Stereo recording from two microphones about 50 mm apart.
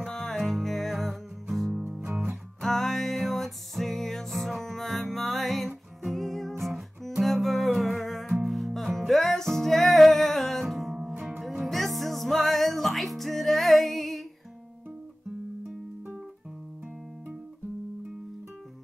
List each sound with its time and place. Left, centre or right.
0.0 s music: centre
1.9 s music: right
2.6 s music: centre
11.1 s music: centre
11.6 s music: centre